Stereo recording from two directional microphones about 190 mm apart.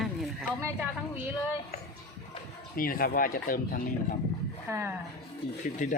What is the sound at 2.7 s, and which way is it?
Speech, 50° left (ahead or behind).